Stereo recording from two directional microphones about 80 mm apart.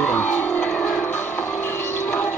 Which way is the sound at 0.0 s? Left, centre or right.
Centre.